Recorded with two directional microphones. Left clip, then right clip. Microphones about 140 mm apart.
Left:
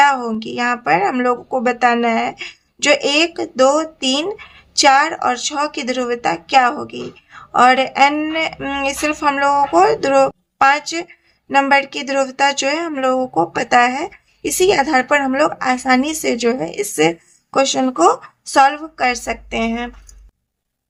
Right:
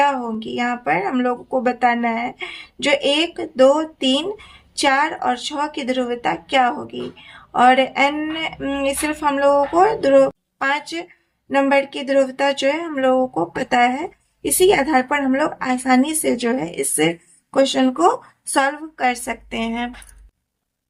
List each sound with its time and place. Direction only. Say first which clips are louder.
0.0 s a woman's voice: left 5 dB; 25° left (ahead or behind)